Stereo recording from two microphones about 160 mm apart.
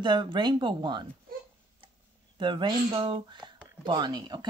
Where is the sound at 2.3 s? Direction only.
30° right (ahead or behind).